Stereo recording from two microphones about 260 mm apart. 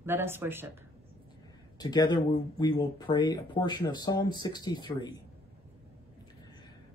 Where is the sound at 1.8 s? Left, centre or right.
Centre.